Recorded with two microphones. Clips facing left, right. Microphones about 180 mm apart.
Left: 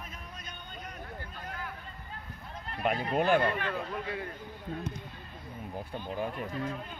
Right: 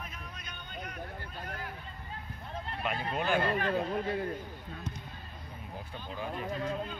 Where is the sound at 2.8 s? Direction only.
50° left (ahead or behind).